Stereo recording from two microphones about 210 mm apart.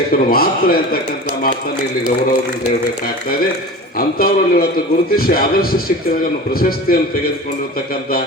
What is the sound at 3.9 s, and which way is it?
A man's voice, 45° left (ahead or behind).